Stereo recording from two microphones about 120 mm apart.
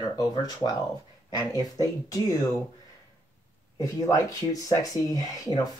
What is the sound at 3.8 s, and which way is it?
Speech, 25° left (ahead or behind).